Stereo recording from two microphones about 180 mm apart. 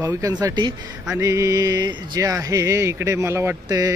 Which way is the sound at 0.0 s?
20° right (ahead or behind).